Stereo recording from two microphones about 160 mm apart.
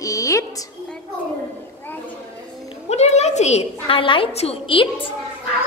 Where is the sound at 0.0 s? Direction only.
20° left (ahead or behind).